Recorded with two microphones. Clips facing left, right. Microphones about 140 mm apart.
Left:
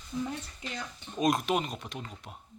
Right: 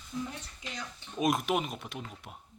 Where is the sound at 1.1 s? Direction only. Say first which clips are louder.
Left 1 dB; 5° right (ahead or behind).